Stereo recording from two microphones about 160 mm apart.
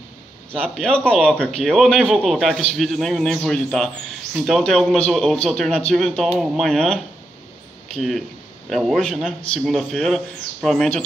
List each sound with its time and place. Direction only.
0.5 s speech: 5° left (ahead or behind)